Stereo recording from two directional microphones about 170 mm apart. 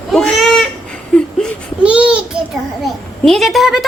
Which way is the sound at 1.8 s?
5° right (ahead or behind).